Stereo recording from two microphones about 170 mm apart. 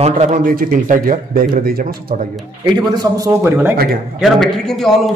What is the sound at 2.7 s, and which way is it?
Speech, 20° right (ahead or behind).